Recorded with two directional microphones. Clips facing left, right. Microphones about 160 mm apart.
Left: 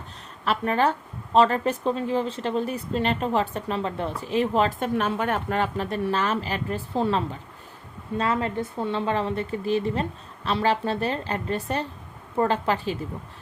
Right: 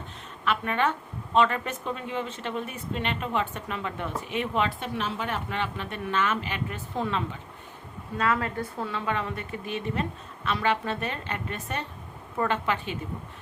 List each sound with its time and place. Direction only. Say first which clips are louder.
0.4 s speech: left 4 dB; 35° left (ahead or behind)